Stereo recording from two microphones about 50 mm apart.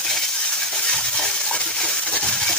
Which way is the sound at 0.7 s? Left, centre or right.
Centre.